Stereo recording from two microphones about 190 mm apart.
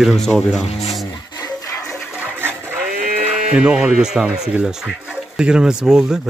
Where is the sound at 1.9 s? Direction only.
5° right (ahead or behind).